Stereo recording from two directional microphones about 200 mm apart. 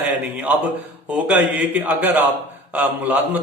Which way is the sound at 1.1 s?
5° right (ahead or behind).